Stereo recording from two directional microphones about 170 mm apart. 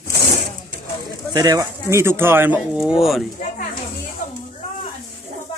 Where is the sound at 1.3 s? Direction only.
20° right (ahead or behind); by 3.3 s centre (ahead or behind).